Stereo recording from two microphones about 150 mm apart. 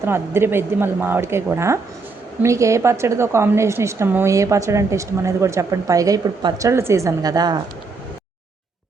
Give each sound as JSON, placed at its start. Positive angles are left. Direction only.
{"t": 0.0, "sound": "a woman's voice", "side_deg": -15}